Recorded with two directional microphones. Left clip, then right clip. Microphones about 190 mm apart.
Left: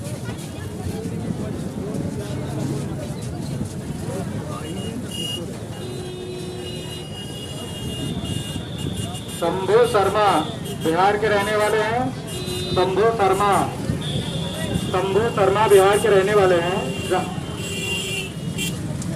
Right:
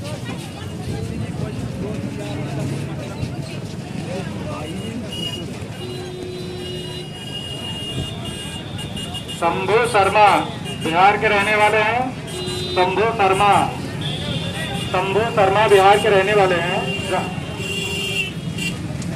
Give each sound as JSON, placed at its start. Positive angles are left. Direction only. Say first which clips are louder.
{"t": 9.4, "sound": "speech", "louder": "even", "side_deg": 15}
{"t": 12.7, "sound": "a man's voice", "louder": "right 1 dB", "side_deg": 40}
{"t": 14.9, "sound": "speech", "louder": "right 2 dB", "side_deg": 40}